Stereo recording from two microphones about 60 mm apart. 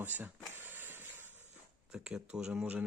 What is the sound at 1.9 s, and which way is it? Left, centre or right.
Speech, centre.